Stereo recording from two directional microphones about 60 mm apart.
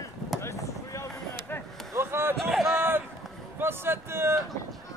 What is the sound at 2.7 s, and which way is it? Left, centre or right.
Run, right.